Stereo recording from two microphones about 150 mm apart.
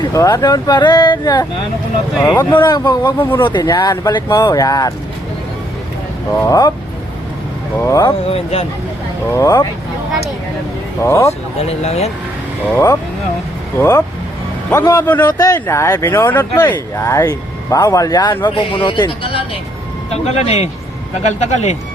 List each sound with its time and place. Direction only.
0.0 s speech: 25° left (ahead or behind)
2.3 s speech: 10° left (ahead or behind)
2.6 s speech: 30° left (ahead or behind)
3.2 s speech: 15° left (ahead or behind)
3.4 s speech: 30° left (ahead or behind)
6.3 s speech: 20° left (ahead or behind)
7.8 s speech: 20° left (ahead or behind)
8.3 s speech: 45° left (ahead or behind)
9.3 s speech: 20° left (ahead or behind)
11.0 s speech: 20° left (ahead or behind)
11.3 s speech: 45° left (ahead or behind)
13.7 s speech: 15° left (ahead or behind); by 21.8 s 50° left (ahead or behind)